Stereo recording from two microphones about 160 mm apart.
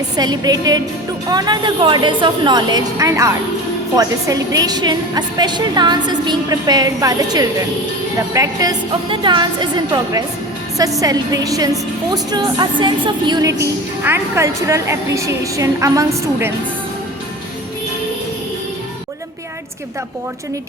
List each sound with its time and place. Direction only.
0.2 s a woman's voice: 25° right (ahead or behind)